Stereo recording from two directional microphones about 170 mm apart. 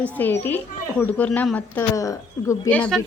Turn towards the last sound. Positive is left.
turn(degrees=5)  # may be behind; listen again after turning